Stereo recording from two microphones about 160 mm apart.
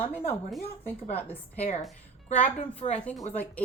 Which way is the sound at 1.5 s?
40° left (ahead or behind).